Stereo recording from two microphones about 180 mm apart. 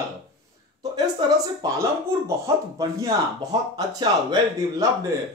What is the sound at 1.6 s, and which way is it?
Speech, 15° right (ahead or behind).